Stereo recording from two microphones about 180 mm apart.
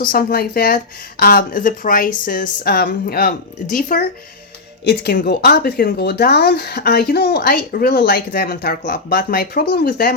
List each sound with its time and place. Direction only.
0.0 s a woman's voice: 55° left (ahead or behind)
4.9 s speech: 65° left (ahead or behind)